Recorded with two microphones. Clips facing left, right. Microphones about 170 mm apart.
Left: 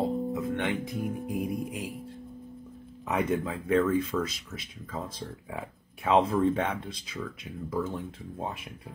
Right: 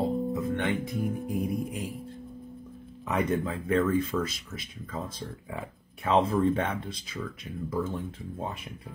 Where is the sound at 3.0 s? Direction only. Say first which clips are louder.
Even; 5° left (ahead or behind).